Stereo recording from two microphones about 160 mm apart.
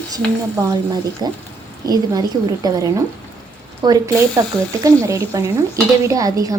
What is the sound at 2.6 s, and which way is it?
Speech, 20° right (ahead or behind).